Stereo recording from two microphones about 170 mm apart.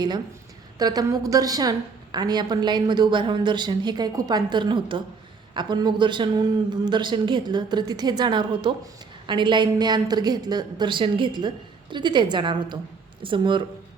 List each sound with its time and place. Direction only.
0.8 s a woman's voice: 25° right (ahead or behind)